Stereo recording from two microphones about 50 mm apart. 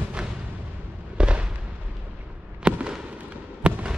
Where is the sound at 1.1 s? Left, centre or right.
Right.